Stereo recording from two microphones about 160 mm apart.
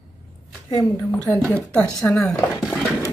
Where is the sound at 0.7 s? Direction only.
20° left (ahead or behind); by 2.8 s 5° left (ahead or behind).